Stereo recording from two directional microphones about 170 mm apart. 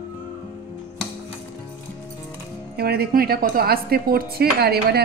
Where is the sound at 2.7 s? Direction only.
65° right (ahead or behind).